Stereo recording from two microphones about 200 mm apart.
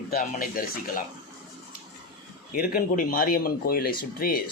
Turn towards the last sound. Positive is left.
turn(degrees=50)  # may be behind; listen again after turning